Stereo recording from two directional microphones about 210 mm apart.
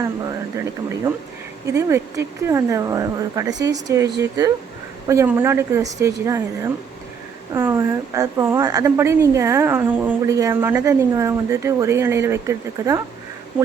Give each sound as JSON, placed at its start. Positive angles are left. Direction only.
{"t": 0.0, "sound": "a woman's voice", "side_deg": -15}
{"t": 7.5, "sound": "a woman's voice", "side_deg": -15}